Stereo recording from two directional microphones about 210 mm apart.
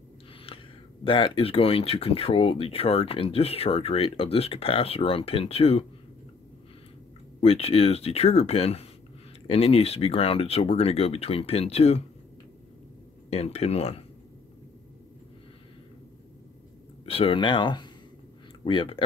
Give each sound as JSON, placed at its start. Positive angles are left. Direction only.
{"t": 0.5, "sound": "a sound", "side_deg": 25}
{"t": 1.0, "sound": "speech", "side_deg": 25}
{"t": 7.3, "sound": "speech", "side_deg": 30}
{"t": 13.3, "sound": "speech", "side_deg": 30}
{"t": 17.0, "sound": "speech", "side_deg": 25}